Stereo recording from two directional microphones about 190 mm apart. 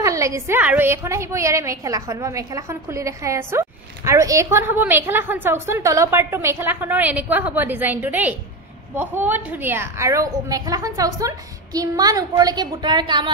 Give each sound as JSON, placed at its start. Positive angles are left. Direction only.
{"t": 0.0, "sound": "a woman's voice", "side_deg": -15}